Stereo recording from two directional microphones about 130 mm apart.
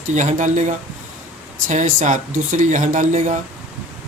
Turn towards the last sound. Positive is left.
turn(degrees=-70)  # may be behind; listen again after turning